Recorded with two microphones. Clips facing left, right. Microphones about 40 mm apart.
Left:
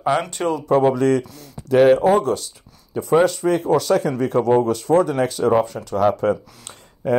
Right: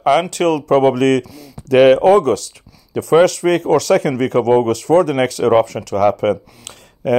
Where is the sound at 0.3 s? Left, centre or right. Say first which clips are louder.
Right 5 dB; right.